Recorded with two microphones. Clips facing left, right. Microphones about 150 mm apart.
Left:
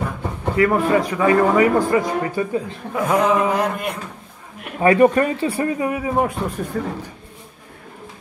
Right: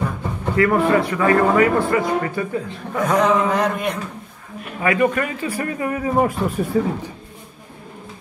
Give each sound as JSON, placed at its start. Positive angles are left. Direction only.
{"t": 0.6, "sound": "a man's voice", "side_deg": 15}
{"t": 2.9, "sound": "a man's voice", "side_deg": 5}
{"t": 4.7, "sound": "a man's voice", "side_deg": 35}
{"t": 6.1, "sound": "a man's voice", "side_deg": -5}